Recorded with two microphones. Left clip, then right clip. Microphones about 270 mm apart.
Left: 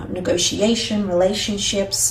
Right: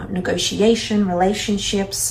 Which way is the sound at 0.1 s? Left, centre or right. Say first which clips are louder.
Left 2 dB; centre.